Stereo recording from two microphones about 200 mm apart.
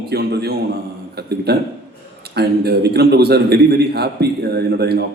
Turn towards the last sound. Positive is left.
turn(degrees=-55)  # may be behind; listen again after turning